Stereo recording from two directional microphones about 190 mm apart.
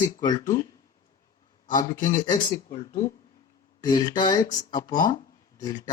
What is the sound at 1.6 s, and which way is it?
Speech, 45° left (ahead or behind).